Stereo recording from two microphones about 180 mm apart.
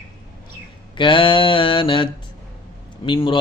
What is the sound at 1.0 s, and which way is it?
Mantra, 25° left (ahead or behind).